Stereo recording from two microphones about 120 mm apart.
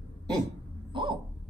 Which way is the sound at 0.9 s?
40° right (ahead or behind).